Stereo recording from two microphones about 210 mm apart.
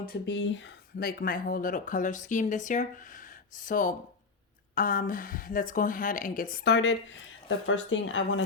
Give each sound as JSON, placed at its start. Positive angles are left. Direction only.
{"t": 0.0, "sound": "speech", "side_deg": 50}